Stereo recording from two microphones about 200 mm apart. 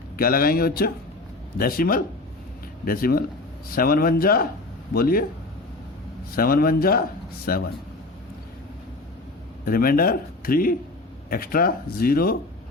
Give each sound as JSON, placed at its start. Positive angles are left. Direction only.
{"t": 0.2, "sound": "speech", "side_deg": 45}
{"t": 6.3, "sound": "speech", "side_deg": 50}
{"t": 9.6, "sound": "speech", "side_deg": 45}